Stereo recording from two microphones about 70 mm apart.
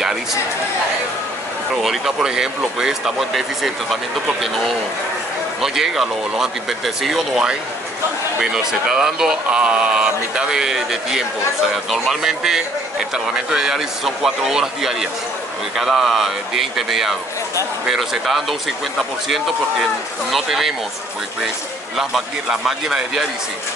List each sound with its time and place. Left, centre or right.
0.0 s a sound: centre
1.8 s speech: centre
5.6 s speech: centre
21.9 s speech: centre